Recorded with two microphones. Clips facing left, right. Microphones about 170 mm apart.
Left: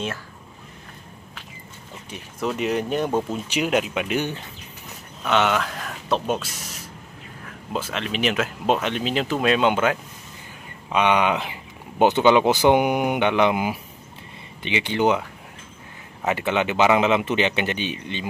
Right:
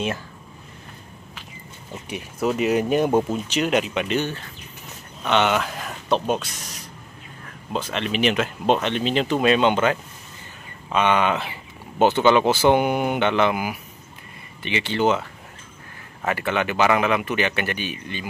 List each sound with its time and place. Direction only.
2.0 s speech: 10° right (ahead or behind)
3.4 s speech: 10° left (ahead or behind)
5.2 s speech: centre (ahead or behind)
16.3 s speech: 20° left (ahead or behind)